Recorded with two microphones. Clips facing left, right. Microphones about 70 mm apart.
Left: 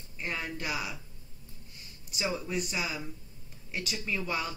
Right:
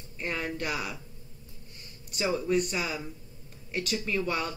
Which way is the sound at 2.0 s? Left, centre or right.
Centre.